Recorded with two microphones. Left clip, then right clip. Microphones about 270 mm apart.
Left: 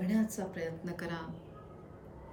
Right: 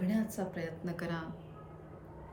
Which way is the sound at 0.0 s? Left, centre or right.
Centre.